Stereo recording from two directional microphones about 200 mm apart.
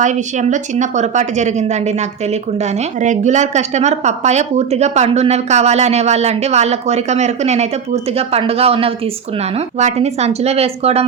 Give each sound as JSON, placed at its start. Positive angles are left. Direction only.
{"t": 0.0, "sound": "speech", "side_deg": -35}